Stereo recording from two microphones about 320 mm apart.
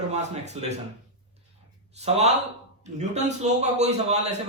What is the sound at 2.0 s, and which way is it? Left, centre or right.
A man's voice, centre.